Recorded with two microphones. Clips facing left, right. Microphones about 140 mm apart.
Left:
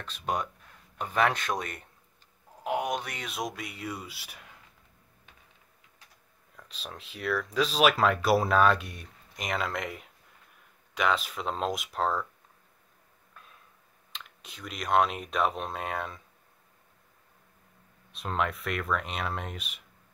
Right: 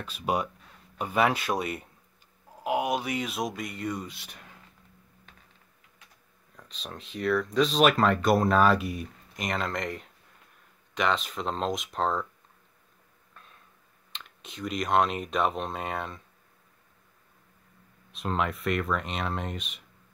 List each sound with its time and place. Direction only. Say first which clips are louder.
0.0 s speech: right 3 dB; 10° right (ahead or behind)
6.5 s speech: right 2 dB; centre (ahead or behind)
13.3 s a sound: even; 5° left (ahead or behind)
14.1 s speech: right 4 dB; centre (ahead or behind)
18.1 s speech: right 1 dB; centre (ahead or behind)